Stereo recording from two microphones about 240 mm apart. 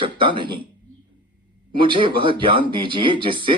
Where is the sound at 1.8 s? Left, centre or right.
Centre.